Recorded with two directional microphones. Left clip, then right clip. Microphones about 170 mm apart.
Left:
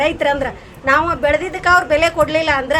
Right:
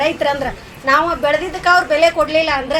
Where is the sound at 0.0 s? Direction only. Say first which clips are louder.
Even; 15° left (ahead or behind).